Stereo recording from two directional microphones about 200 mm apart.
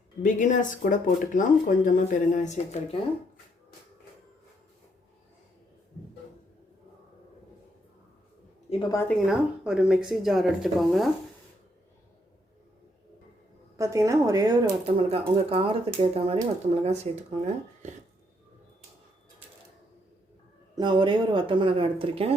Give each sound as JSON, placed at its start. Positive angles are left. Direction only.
{"t": 0.2, "sound": "speech", "side_deg": 40}
{"t": 8.7, "sound": "a woman's voice", "side_deg": 30}
{"t": 9.0, "sound": "speech", "side_deg": 0}
{"t": 13.7, "sound": "speech", "side_deg": -15}
{"t": 20.7, "sound": "speech", "side_deg": -25}